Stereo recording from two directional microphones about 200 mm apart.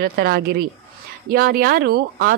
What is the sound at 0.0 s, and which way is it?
Speech, 50° right (ahead or behind).